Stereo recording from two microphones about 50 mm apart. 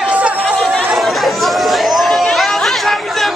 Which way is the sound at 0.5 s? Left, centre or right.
Centre.